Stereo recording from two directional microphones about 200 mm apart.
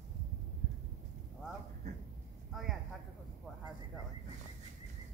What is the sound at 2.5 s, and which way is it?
Speech, centre (ahead or behind).